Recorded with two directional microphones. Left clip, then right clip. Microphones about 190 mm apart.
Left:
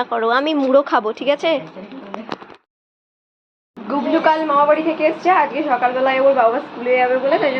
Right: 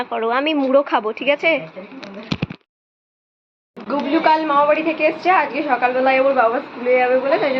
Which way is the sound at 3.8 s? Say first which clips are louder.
Left 1 dB; 10° right (ahead or behind).